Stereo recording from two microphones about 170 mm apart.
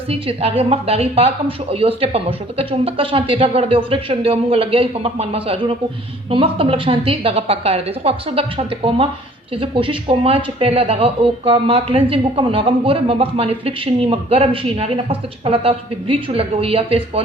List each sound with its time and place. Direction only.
0.1 s a woman's voice: 35° right (ahead or behind)